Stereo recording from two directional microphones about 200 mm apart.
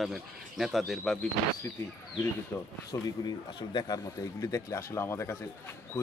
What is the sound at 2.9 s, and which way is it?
Speech, 20° left (ahead or behind).